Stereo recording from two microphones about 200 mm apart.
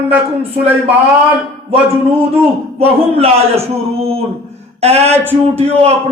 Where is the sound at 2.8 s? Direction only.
30° right (ahead or behind).